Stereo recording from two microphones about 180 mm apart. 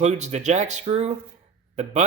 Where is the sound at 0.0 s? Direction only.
40° right (ahead or behind).